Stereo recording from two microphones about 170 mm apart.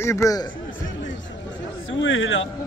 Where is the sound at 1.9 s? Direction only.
90° left.